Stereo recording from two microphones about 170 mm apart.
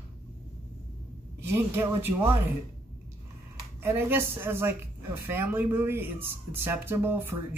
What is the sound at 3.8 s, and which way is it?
Speech, 15° right (ahead or behind).